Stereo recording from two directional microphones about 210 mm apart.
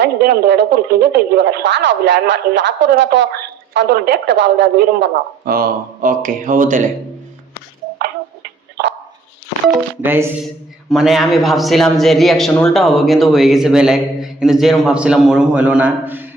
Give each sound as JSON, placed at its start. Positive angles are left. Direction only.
{"t": 0.0, "sound": "speech", "side_deg": -55}
{"t": 5.5, "sound": "speech", "side_deg": -45}
{"t": 10.0, "sound": "speech", "side_deg": -10}